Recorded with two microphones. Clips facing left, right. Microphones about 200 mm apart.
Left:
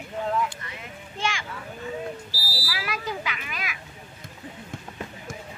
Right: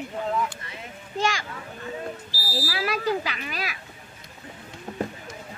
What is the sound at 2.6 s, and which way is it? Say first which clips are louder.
Speech: right 6 dB; 40° right (ahead or behind).